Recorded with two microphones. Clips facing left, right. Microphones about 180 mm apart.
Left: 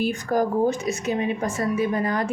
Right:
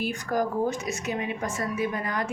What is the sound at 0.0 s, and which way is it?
A woman's voice, 30° left (ahead or behind).